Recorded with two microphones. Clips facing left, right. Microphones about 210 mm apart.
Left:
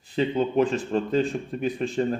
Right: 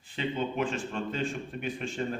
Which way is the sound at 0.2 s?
35° left (ahead or behind).